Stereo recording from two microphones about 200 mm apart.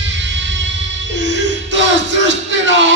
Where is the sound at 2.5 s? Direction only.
65° right (ahead or behind).